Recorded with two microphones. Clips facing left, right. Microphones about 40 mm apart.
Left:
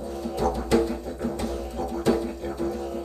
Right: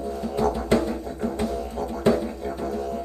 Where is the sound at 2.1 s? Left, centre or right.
Centre.